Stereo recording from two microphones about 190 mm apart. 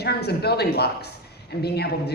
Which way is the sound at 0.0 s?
60° left (ahead or behind).